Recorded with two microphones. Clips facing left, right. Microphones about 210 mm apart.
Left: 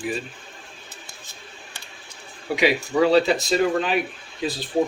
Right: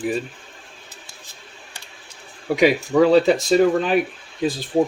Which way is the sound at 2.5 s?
45° right (ahead or behind).